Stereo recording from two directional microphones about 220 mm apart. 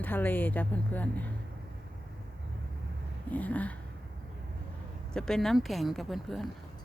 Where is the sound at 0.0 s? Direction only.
10° left (ahead or behind).